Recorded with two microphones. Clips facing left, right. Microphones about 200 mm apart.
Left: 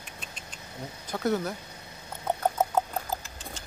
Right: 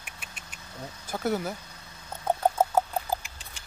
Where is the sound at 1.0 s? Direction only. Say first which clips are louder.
Left 1 dB; 5° right (ahead or behind).